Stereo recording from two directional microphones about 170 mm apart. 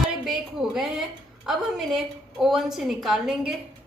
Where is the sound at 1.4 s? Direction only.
Centre (ahead or behind).